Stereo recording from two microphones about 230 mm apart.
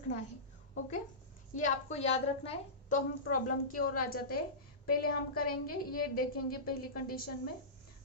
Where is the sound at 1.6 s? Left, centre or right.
Left.